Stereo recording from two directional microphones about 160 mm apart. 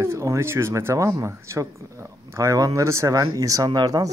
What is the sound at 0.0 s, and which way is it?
Speech, 15° right (ahead or behind).